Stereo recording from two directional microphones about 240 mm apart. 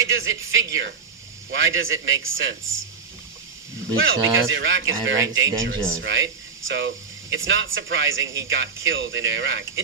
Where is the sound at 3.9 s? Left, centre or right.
Right.